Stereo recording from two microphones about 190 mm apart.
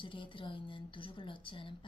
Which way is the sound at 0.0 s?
25° left (ahead or behind).